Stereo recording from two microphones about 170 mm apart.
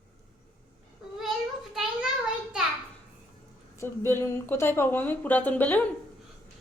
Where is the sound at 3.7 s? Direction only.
15° left (ahead or behind).